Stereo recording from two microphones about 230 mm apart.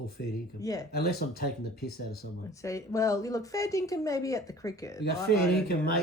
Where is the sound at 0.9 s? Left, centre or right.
Left.